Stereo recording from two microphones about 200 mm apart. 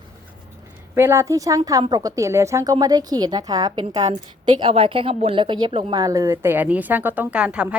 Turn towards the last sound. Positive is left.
turn(degrees=-5)  # may be behind; listen again after turning